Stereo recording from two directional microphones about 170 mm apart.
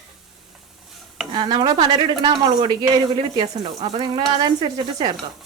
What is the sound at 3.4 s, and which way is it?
A woman's voice, 35° right (ahead or behind).